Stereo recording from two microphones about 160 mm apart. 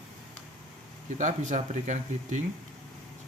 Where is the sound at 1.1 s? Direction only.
50° right (ahead or behind).